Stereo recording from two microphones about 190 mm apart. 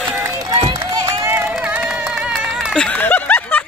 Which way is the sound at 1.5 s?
5° right (ahead or behind).